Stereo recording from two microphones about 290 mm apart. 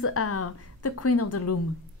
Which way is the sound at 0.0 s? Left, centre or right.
Left.